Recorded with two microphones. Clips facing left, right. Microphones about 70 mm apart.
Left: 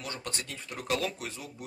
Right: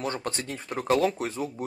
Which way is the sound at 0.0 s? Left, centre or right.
Right.